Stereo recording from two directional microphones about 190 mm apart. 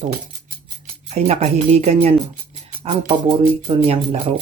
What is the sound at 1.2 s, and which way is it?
Speech, 35° right (ahead or behind).